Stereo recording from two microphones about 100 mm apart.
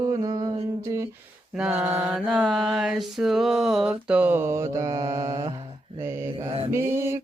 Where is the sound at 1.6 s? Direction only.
15° right (ahead or behind).